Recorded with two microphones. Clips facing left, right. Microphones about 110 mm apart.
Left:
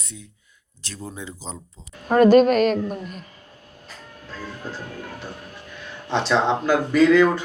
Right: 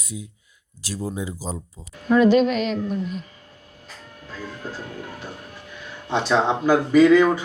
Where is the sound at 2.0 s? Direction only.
50° left (ahead or behind).